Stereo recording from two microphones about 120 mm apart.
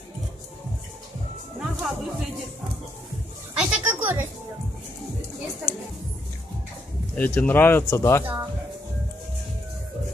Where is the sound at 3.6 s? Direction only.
10° right (ahead or behind).